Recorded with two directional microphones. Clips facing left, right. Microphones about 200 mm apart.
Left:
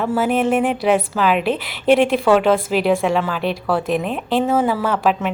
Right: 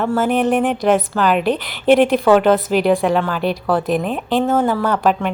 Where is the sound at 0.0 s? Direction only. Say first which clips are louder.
Right 1 dB; 5° left (ahead or behind).